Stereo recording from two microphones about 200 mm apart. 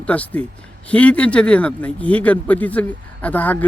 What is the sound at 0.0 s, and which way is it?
A man's voice, 5° left (ahead or behind).